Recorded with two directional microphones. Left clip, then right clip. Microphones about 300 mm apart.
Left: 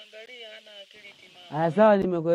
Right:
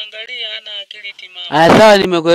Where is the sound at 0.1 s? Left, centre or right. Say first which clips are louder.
Right 19 dB; right.